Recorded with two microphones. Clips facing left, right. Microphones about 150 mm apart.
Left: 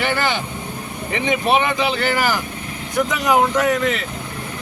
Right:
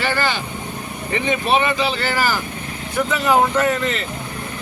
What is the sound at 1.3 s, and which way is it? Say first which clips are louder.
Speech: left 1 dB; 15° left (ahead or behind).